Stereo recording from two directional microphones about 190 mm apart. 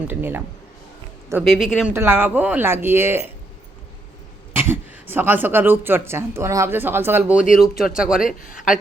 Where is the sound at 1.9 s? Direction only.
10° right (ahead or behind).